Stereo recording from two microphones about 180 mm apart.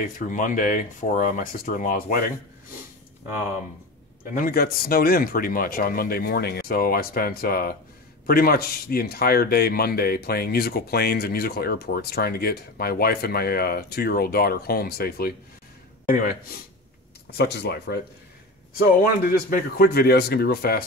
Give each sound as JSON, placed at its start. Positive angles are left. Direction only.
{"t": 0.0, "sound": "speech", "side_deg": 45}
{"t": 4.2, "sound": "speech", "side_deg": 55}
{"t": 17.3, "sound": "speech", "side_deg": 65}
{"t": 18.8, "sound": "speech", "side_deg": 55}